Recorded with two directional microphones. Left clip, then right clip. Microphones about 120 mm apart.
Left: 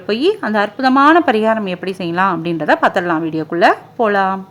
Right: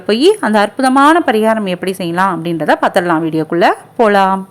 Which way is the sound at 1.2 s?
10° right (ahead or behind).